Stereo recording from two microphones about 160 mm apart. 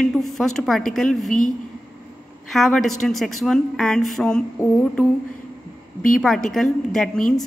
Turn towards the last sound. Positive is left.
turn(degrees=5)  # may be behind; listen again after turning